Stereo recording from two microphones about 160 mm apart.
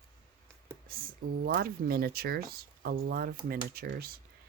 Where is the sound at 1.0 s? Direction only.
60° right (ahead or behind).